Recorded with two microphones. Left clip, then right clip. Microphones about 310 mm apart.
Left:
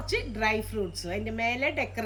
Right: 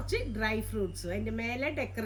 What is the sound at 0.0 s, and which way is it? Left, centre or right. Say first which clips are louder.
A woman's voice: left 4 dB; centre.